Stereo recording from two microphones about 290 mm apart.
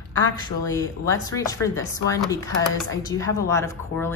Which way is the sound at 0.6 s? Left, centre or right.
Centre.